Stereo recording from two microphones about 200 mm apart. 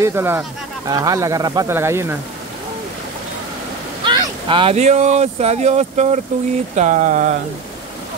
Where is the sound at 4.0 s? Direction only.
25° right (ahead or behind).